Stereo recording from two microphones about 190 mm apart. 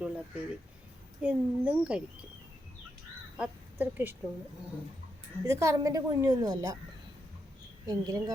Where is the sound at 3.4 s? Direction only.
10° right (ahead or behind).